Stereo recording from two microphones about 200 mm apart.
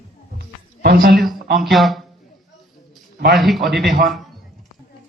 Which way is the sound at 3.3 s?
Centre (ahead or behind).